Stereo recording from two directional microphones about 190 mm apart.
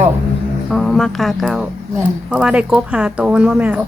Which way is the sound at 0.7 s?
Centre (ahead or behind).